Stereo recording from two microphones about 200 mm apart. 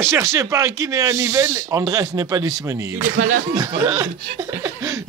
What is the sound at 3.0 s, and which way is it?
Speech, 40° right (ahead or behind).